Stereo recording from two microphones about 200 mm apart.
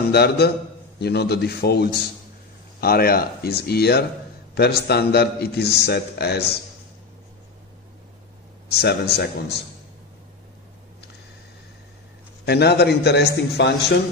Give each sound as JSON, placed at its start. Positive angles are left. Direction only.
{"t": 0.1, "sound": "a man's voice", "side_deg": 55}
{"t": 8.7, "sound": "a man's voice", "side_deg": 55}
{"t": 12.4, "sound": "a man's voice", "side_deg": 55}